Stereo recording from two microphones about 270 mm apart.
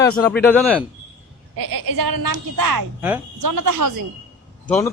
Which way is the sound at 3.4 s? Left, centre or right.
Right.